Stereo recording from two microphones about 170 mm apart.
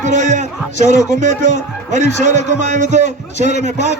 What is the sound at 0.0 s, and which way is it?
A man's voice, 45° right (ahead or behind).